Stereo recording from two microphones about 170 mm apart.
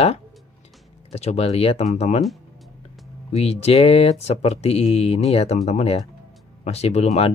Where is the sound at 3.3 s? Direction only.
35° left (ahead or behind).